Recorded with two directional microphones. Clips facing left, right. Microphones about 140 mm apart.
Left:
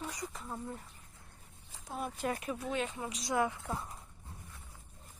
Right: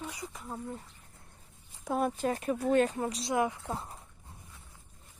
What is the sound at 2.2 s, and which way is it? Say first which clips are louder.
Speech: right 6 dB; 40° right (ahead or behind).